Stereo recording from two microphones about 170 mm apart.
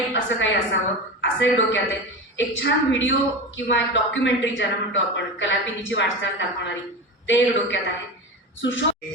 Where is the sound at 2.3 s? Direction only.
90° left.